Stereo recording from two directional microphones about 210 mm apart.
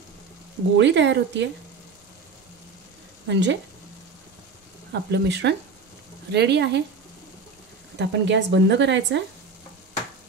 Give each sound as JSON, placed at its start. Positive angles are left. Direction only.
{"t": 0.7, "sound": "speech", "side_deg": -55}
{"t": 3.3, "sound": "speech", "side_deg": -55}
{"t": 4.9, "sound": "speech", "side_deg": -55}
{"t": 8.0, "sound": "speech", "side_deg": -55}